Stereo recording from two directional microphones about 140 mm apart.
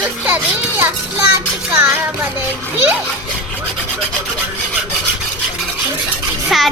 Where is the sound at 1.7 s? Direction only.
15° right (ahead or behind).